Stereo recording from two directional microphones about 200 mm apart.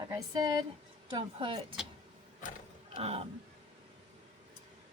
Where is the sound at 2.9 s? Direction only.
30° right (ahead or behind).